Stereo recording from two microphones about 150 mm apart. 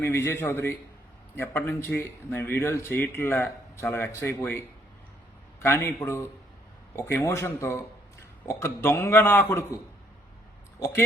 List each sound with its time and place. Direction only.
0.0 s speech: 15° left (ahead or behind)
5.6 s speech: 15° left (ahead or behind)